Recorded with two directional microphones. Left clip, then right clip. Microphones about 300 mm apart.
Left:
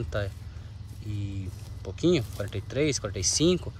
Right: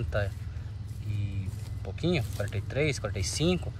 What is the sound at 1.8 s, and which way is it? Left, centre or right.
Speech, centre.